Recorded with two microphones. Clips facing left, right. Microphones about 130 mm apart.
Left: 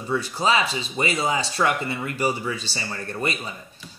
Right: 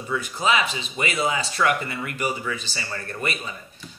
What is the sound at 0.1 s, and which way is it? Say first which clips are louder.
Speech: left 1 dB; 30° left (ahead or behind).